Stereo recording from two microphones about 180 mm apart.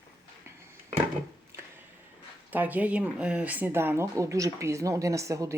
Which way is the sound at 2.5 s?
10° right (ahead or behind).